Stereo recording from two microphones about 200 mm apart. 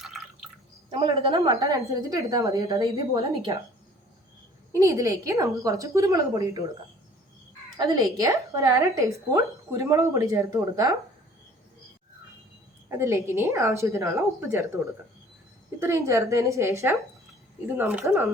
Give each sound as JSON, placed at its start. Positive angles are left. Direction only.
{"t": 0.0, "sound": "drip", "side_deg": 0}
{"t": 0.9, "sound": "a woman's voice", "side_deg": -25}
{"t": 4.7, "sound": "speech", "side_deg": -15}
{"t": 7.8, "sound": "speech", "side_deg": -20}
{"t": 13.0, "sound": "speech", "side_deg": -15}
{"t": 15.8, "sound": "speech", "side_deg": -15}